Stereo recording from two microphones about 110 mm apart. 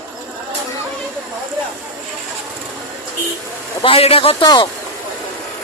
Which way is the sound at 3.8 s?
60° left (ahead or behind).